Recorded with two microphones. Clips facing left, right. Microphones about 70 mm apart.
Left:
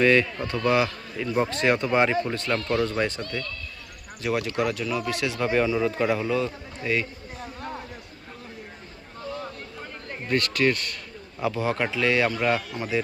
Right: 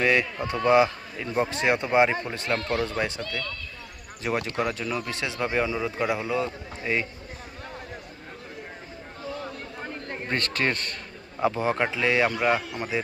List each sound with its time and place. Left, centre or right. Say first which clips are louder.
0.0 s speech: left 3 dB; centre
4.2 s speech: left 2 dB; right
10.2 s speech: left 4 dB; right